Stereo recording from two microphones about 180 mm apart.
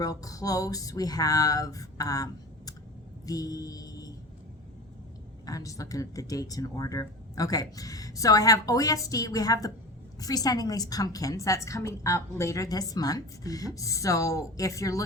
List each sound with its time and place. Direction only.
0.0 s a woman's voice: 20° left (ahead or behind)
3.2 s a sound: 20° left (ahead or behind)
5.5 s a woman's voice: 20° left (ahead or behind)